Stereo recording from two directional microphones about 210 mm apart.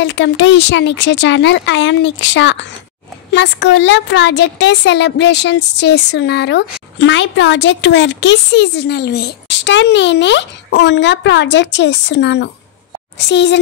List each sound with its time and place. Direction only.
0.0 s a woman's voice: 60° left (ahead or behind)